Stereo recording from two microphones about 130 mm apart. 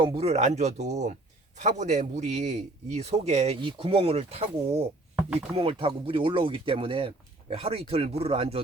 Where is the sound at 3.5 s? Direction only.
40° right (ahead or behind).